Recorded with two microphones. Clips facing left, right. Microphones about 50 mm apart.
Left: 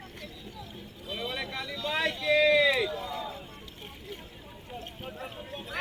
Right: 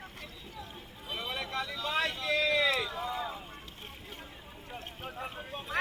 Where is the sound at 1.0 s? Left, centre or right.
Centre.